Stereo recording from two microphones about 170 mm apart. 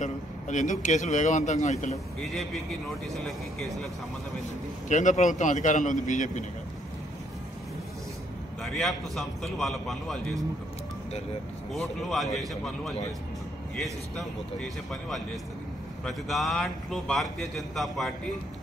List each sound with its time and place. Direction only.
0.0 s a man's voice: 45° left (ahead or behind)
2.1 s a man's voice: centre (ahead or behind)
4.8 s a man's voice: 45° left (ahead or behind)
8.6 s a man's voice: centre (ahead or behind)
11.7 s a man's voice: centre (ahead or behind)
14.1 s a man's voice: centre (ahead or behind)